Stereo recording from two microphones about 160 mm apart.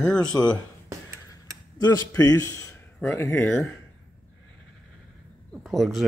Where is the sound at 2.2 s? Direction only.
20° left (ahead or behind).